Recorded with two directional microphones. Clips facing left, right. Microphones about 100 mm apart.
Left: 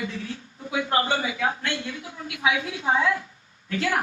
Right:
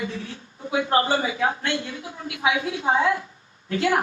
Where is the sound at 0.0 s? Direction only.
30° right (ahead or behind).